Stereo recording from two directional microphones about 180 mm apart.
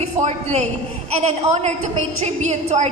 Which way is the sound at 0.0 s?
40° right (ahead or behind).